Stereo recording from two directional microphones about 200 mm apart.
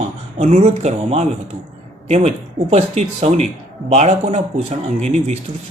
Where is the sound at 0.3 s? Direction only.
35° right (ahead or behind).